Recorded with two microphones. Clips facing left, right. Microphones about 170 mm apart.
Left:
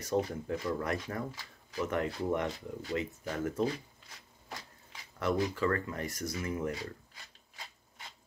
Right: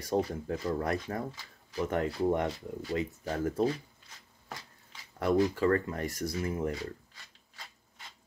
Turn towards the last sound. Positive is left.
turn(degrees=-35)  # may be behind; listen again after turning